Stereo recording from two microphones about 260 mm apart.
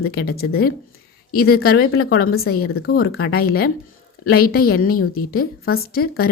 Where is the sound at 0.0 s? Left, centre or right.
Left.